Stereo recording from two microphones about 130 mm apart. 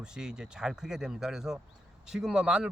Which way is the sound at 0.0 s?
5° right (ahead or behind).